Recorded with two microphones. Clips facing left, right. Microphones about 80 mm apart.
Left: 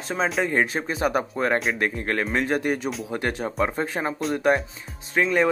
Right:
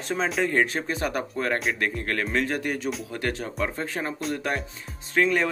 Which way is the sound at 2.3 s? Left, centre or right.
Left.